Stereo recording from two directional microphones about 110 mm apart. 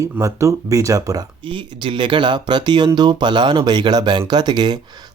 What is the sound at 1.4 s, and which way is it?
Speech, 50° right (ahead or behind).